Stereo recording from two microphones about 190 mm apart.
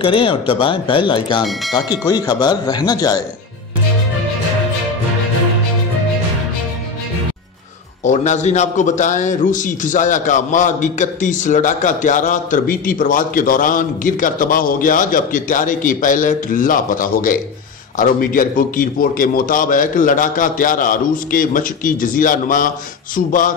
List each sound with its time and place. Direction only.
0.0 s speech: 30° left (ahead or behind)
8.0 s a man's voice: 40° left (ahead or behind)